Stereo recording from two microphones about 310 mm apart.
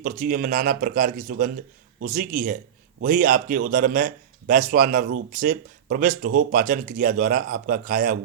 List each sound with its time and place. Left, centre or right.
0.0 s speech: right